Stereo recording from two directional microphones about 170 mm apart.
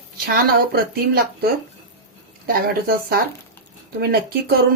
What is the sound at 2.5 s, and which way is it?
Speech, 60° right (ahead or behind).